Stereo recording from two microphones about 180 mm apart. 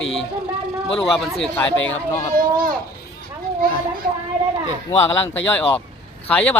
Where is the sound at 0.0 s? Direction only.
90° left.